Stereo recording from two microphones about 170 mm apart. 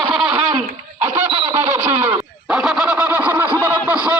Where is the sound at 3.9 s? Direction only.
10° right (ahead or behind).